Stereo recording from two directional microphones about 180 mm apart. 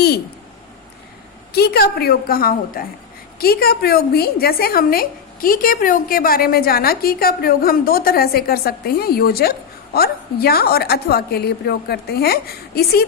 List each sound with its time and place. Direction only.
1.5 s a woman's voice: 60° left (ahead or behind)